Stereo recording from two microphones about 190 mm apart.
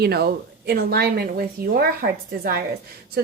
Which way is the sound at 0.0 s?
60° right (ahead or behind).